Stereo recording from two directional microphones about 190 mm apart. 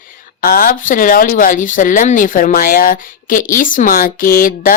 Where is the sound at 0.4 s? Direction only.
50° left (ahead or behind).